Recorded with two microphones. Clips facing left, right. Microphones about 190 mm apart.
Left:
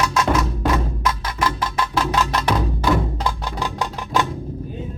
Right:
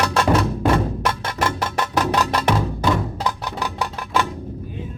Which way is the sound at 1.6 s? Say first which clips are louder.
Right 1 dB; 40° right (ahead or behind).